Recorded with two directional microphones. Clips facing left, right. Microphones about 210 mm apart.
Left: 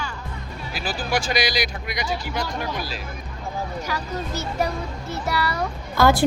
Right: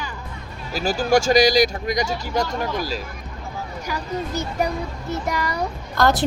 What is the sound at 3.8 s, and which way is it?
Speech, 15° right (ahead or behind).